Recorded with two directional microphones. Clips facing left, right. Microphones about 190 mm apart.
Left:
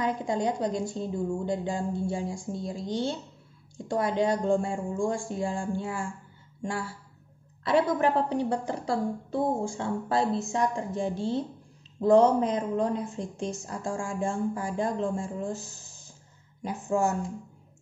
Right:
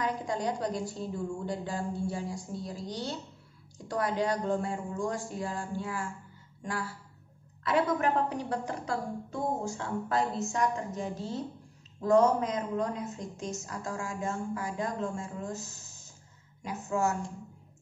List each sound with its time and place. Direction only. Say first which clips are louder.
0.0 s a woman's voice: left 4 dB; 25° left (ahead or behind)